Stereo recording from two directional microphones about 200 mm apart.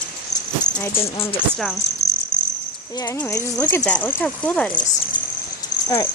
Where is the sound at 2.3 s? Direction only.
5° left (ahead or behind).